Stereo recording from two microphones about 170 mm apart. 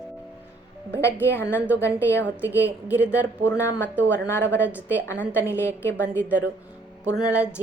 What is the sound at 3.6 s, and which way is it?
Speech, 15° left (ahead or behind).